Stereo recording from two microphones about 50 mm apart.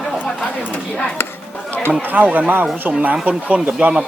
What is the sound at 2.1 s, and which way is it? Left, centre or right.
Speech, right.